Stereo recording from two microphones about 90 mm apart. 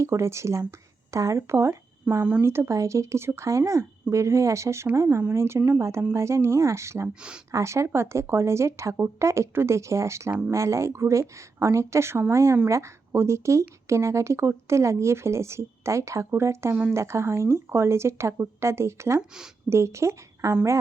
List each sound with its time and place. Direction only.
0.0 s speech: 30° right (ahead or behind)
7.1 s speech: 10° right (ahead or behind)
7.5 s speech: 35° right (ahead or behind)